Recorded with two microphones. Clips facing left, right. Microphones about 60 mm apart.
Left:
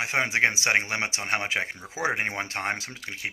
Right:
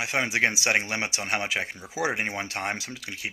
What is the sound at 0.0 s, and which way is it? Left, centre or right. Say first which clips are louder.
Speech: left 1 dB; left.